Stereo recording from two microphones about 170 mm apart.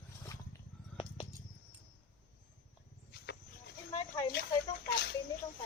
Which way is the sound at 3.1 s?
75° left (ahead or behind).